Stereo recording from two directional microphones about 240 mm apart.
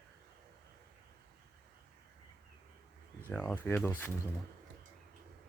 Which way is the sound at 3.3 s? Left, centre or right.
Centre.